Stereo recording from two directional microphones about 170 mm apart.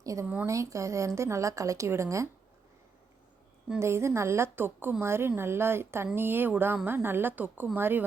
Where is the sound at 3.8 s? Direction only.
15° right (ahead or behind).